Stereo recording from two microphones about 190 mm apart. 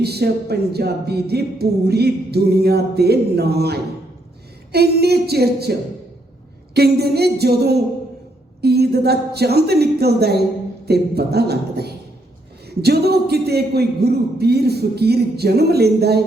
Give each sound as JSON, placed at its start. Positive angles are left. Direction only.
{"t": 0.0, "sound": "speech", "side_deg": -55}
{"t": 6.7, "sound": "speech", "side_deg": -60}